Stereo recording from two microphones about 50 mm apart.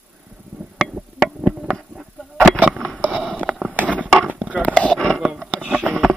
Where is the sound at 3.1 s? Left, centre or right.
Centre.